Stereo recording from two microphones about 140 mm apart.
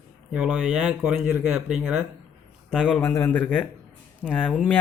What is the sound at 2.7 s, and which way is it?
Speech, 5° left (ahead or behind).